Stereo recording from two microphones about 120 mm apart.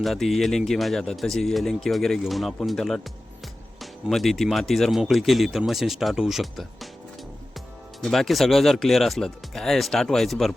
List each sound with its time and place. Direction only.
0.0 s speech: centre (ahead or behind)
8.0 s speech: centre (ahead or behind)